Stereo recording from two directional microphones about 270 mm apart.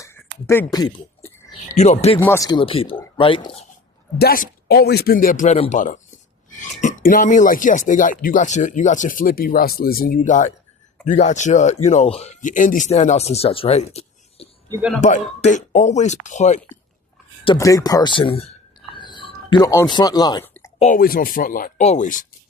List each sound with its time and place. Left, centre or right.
0.0 s a sound: centre
2.1 s speech: centre
4.2 s speech: left
14.7 s speech: centre
15.0 s speech: left
17.4 s speech: centre
18.9 s a sound: centre
20.7 s speech: left